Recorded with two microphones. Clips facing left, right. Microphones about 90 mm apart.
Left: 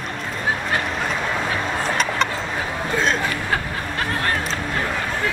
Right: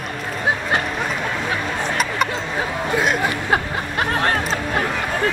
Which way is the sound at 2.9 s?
10° right (ahead or behind).